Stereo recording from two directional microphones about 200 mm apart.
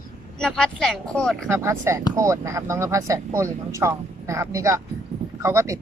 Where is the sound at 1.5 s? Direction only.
15° right (ahead or behind).